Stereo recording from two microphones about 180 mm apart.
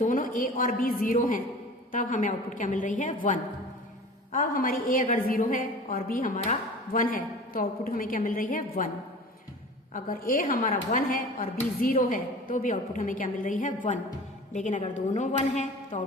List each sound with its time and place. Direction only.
0.0 s a woman's voice: 50° left (ahead or behind)
9.9 s a woman's voice: 50° left (ahead or behind)